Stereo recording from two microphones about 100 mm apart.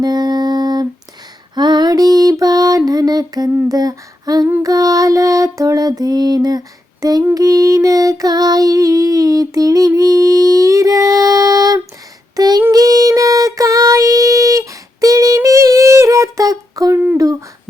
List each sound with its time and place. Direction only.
0.0 s a sound: 45° right (ahead or behind)
1.5 s music: 45° right (ahead or behind)
3.7 s humming: 40° right (ahead or behind)
4.6 s music: 35° right (ahead or behind)
7.0 s a sound: 35° right (ahead or behind)
7.3 s music: 35° right (ahead or behind)
12.4 s child singing: 40° right (ahead or behind)